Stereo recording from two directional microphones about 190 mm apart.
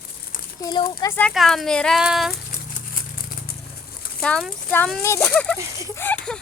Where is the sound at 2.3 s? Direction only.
50° left (ahead or behind).